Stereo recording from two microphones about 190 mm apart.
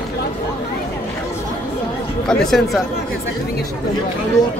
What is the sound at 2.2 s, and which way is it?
Speech, 5° left (ahead or behind).